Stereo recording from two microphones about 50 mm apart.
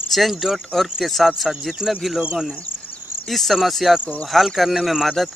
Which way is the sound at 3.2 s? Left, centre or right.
Centre.